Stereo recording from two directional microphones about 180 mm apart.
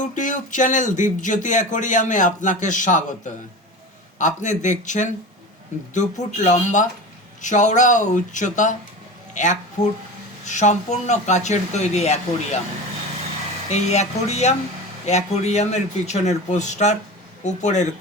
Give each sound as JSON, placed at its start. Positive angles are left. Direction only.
{"t": 0.0, "sound": "speech", "side_deg": 45}
{"t": 9.8, "sound": "speech", "side_deg": 20}
{"t": 10.4, "sound": "speech", "side_deg": 40}
{"t": 13.7, "sound": "speech", "side_deg": 40}